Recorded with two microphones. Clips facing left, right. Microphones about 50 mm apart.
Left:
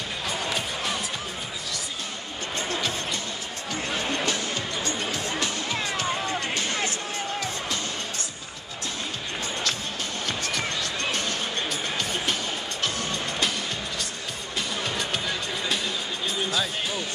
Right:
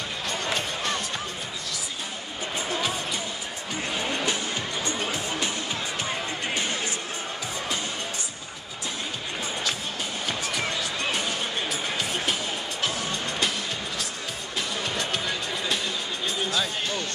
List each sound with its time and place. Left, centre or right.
0.6 s music: centre
2.5 s music: centre
4.8 s music: centre
10.2 s music: centre
14.8 s music: centre